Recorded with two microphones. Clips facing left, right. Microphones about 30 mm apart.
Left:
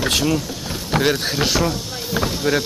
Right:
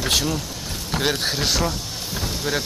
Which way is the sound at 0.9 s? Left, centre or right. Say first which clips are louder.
Left 5 dB; left.